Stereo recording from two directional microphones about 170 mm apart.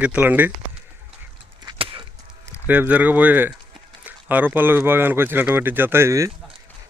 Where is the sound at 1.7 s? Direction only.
30° right (ahead or behind).